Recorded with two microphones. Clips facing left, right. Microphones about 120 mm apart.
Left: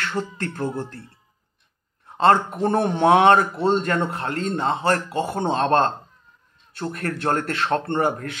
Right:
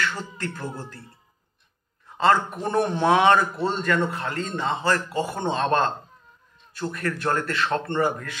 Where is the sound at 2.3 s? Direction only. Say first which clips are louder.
Left 3 dB; 25° left (ahead or behind).